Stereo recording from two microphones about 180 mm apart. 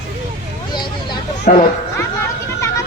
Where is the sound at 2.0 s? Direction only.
15° left (ahead or behind).